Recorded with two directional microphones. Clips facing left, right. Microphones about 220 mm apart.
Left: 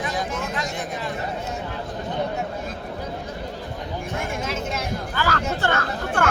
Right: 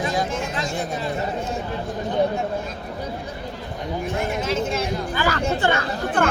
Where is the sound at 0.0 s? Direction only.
30° right (ahead or behind).